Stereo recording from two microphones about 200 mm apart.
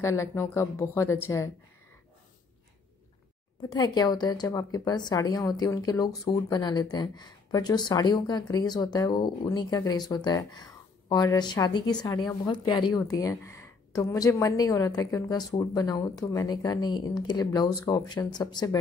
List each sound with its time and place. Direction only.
0.0 s a woman's voice: 15° left (ahead or behind)
3.7 s a woman's voice: 20° left (ahead or behind)